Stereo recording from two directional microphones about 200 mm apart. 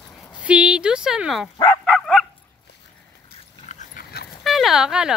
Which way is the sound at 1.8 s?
Centre (ahead or behind).